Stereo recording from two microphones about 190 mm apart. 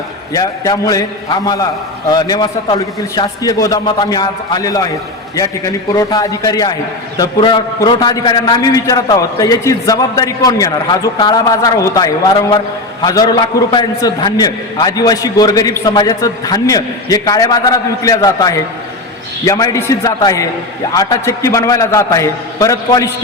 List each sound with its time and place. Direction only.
0.3 s a man's voice: 20° left (ahead or behind)